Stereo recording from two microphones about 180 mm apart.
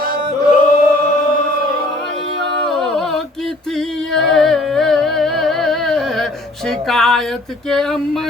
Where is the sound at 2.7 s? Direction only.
Centre (ahead or behind).